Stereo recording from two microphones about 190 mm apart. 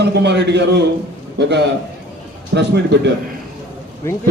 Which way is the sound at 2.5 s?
65° right (ahead or behind).